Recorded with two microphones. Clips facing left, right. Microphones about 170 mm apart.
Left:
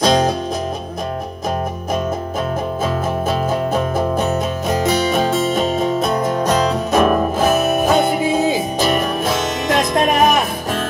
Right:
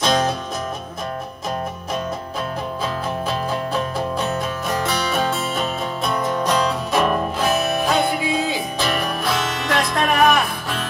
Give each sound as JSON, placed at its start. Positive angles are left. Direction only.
{"t": 0.0, "sound": "music", "side_deg": 35}
{"t": 2.8, "sound": "music", "side_deg": 45}